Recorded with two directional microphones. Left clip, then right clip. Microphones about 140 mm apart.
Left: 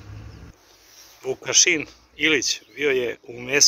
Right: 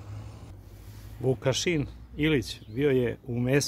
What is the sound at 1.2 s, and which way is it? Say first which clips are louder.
Speech: left 7 dB; 5° right (ahead or behind).